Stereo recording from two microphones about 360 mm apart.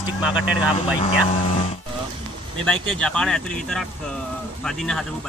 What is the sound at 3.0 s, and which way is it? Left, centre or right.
Speech, centre.